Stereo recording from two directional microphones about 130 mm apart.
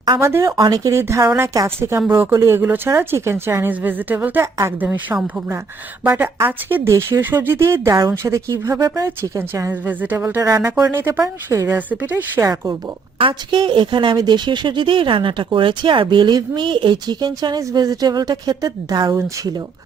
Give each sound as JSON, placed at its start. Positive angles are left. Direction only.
{"t": 0.2, "sound": "speech", "side_deg": -20}
{"t": 0.5, "sound": "speech", "side_deg": -30}
{"t": 13.1, "sound": "speech", "side_deg": -40}